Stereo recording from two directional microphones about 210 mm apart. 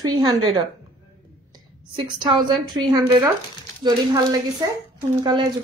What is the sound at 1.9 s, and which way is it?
Speech, 20° right (ahead or behind).